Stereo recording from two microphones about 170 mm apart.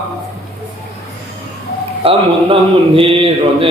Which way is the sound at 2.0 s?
35° right (ahead or behind).